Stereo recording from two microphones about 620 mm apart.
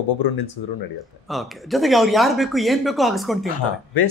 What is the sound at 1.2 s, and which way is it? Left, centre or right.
Speech, centre.